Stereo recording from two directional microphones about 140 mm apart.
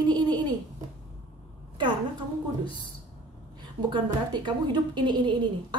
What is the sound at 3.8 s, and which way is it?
A woman's voice, 35° right (ahead or behind).